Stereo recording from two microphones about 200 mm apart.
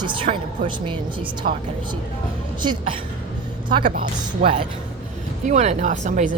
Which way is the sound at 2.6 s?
20° right (ahead or behind).